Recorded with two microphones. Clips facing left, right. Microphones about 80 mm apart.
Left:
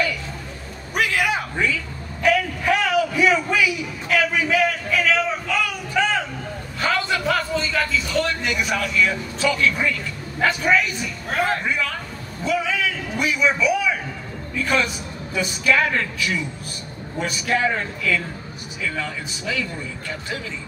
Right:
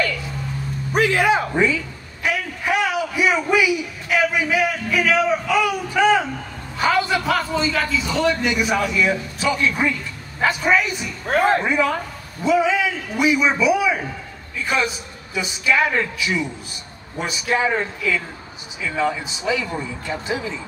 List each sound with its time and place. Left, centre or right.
0.9 s a sound: right; by 7.6 s centre
7.8 s a man's voice: centre
11.4 s a man's voice: right